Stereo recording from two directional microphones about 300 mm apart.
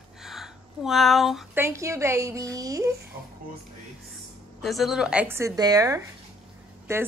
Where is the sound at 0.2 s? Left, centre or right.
Centre.